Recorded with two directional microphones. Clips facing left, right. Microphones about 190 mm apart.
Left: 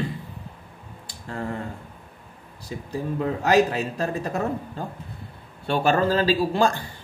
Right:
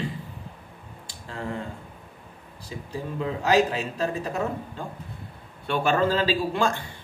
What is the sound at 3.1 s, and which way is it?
A man's voice, 50° left (ahead or behind).